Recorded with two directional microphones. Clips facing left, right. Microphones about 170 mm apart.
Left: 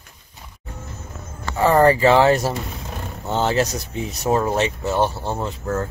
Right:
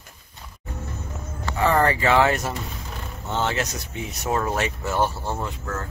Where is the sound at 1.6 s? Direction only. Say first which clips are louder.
Left 6 dB; 35° left (ahead or behind).